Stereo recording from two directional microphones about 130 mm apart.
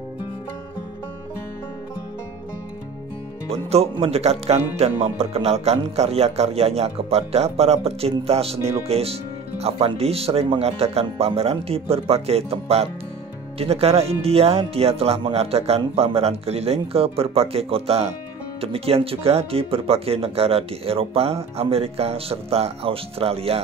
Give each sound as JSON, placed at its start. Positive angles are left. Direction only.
{"t": 3.4, "sound": "speech", "side_deg": -50}